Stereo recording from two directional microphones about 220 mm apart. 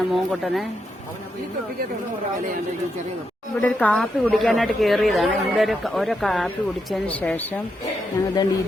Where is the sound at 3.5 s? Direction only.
5° left (ahead or behind).